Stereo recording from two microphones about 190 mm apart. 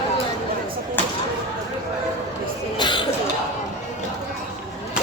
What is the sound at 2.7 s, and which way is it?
Cough, 25° left (ahead or behind).